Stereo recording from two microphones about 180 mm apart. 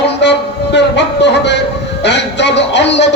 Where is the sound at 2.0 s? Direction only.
75° left (ahead or behind).